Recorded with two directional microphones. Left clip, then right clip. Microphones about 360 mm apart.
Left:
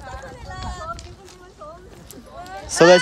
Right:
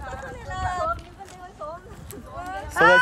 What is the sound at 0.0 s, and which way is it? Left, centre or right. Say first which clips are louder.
Run: right 1 dB; right.